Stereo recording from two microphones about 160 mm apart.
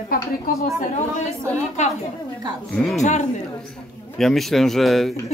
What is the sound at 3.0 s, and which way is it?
Speech, 45° left (ahead or behind).